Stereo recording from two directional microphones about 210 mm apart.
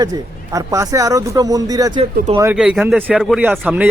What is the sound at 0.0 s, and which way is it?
A man's voice, 15° right (ahead or behind).